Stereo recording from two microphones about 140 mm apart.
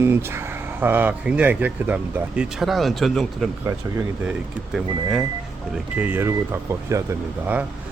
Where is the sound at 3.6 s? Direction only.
15° right (ahead or behind).